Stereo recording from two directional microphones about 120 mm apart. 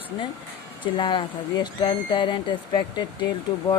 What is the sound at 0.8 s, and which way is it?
Speech, 40° left (ahead or behind).